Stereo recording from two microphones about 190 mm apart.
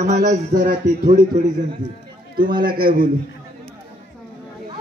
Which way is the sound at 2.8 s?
50° right (ahead or behind).